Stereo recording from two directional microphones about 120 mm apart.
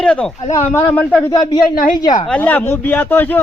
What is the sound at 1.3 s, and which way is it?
Speech, 35° left (ahead or behind).